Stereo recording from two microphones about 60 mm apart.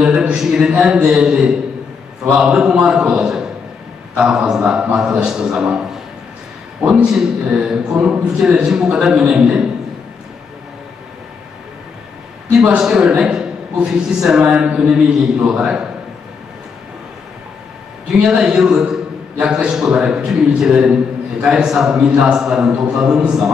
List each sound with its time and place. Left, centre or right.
0.0 s a man's voice: centre
12.4 s a man's voice: centre
18.1 s a man's voice: centre